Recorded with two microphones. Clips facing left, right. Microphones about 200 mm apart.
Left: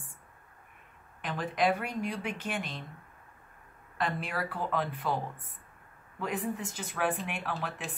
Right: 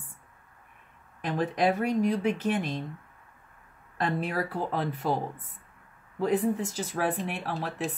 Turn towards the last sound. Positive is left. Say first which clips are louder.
# right 5 dB
turn(degrees=-35)  # may be behind; listen again after turning